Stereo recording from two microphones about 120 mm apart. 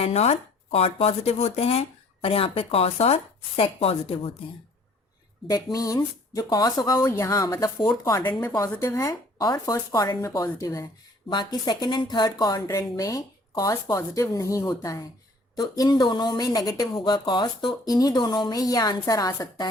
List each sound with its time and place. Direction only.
0.0 s speech: 60° left (ahead or behind)
5.7 s a woman's voice: 30° left (ahead or behind)
11.3 s a woman's voice: 35° left (ahead or behind)